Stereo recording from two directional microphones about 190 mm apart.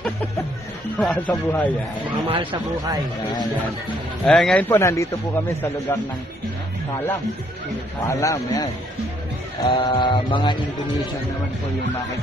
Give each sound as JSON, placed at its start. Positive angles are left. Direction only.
{"t": 0.9, "sound": "speech", "side_deg": 5}
{"t": 2.2, "sound": "speech", "side_deg": -30}
{"t": 4.3, "sound": "speech", "side_deg": 5}
{"t": 8.1, "sound": "speech", "side_deg": 15}
{"t": 9.7, "sound": "mantra", "side_deg": 25}